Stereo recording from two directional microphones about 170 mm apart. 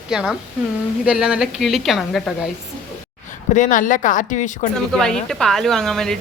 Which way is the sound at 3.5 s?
50° left (ahead or behind).